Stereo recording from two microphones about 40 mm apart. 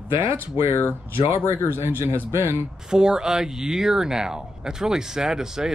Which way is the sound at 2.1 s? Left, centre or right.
Right.